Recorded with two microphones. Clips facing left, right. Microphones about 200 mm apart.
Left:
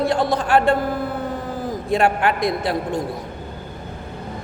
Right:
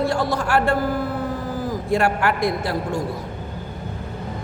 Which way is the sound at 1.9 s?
20° left (ahead or behind).